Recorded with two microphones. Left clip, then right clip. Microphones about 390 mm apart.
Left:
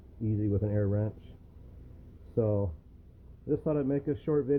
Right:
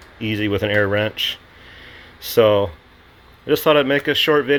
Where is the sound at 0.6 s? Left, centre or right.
Right.